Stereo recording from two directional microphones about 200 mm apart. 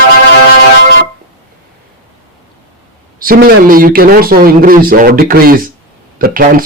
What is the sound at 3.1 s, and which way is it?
Speech, 45° right (ahead or behind).